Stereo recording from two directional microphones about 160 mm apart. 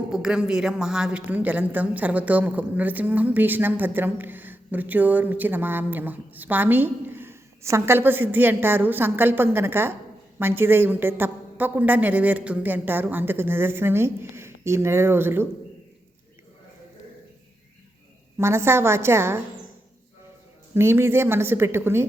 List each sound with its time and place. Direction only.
0.1 s a woman's voice: 5° right (ahead or behind)
18.3 s a woman's voice: 15° right (ahead or behind)
20.7 s a woman's voice: 15° right (ahead or behind)